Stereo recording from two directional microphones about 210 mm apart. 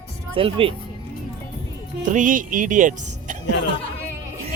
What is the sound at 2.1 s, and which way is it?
A woman's voice, 40° right (ahead or behind).